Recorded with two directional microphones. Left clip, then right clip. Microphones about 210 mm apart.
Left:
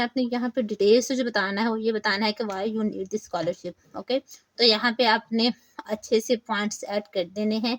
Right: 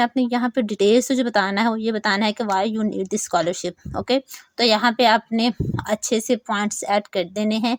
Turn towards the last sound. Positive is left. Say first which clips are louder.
# right 4 dB
turn(degrees=-30)  # may be behind; listen again after turning